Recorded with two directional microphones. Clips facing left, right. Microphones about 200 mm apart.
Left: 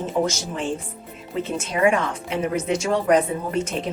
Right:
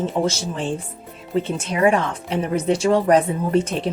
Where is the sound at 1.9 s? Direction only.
35° right (ahead or behind).